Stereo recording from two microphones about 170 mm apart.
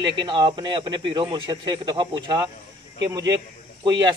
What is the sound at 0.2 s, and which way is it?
A man's voice, 25° right (ahead or behind).